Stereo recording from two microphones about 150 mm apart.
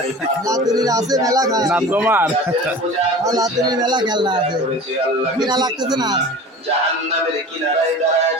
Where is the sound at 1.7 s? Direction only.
10° right (ahead or behind).